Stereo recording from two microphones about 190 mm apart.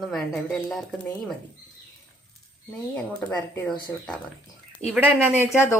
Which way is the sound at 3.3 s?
20° left (ahead or behind).